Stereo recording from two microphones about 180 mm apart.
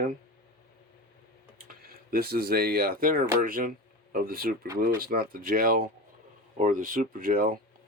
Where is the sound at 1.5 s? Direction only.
55° right (ahead or behind).